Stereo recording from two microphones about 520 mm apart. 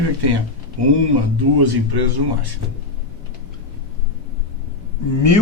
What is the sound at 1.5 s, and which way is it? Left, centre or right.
Speech, right.